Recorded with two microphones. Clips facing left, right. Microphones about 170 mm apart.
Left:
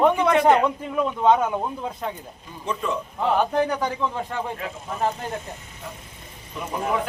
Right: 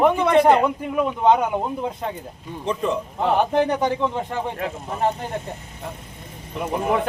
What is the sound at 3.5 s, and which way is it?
Speech, 25° right (ahead or behind).